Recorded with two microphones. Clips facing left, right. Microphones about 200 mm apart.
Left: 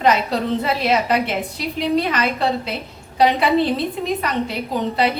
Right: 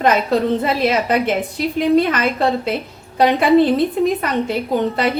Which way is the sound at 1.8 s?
50° right (ahead or behind).